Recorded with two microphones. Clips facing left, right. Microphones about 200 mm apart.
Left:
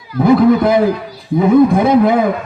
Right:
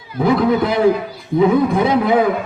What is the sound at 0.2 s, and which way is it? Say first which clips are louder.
Speech: left 5 dB; 50° left (ahead or behind).